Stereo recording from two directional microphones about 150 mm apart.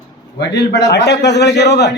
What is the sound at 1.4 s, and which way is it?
Speech, 90° left.